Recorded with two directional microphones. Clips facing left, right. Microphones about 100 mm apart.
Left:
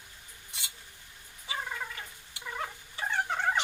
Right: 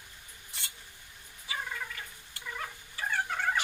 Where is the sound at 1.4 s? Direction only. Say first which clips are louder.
Left 1 dB; 20° left (ahead or behind).